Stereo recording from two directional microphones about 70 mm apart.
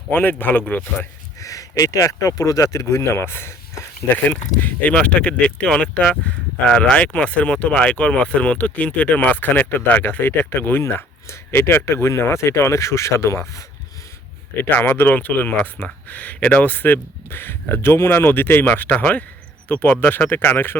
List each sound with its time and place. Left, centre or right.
0.1 s speech: left
1.4 s speech: left
2.7 s speech: left
4.1 s speech: left
14.6 s speech: left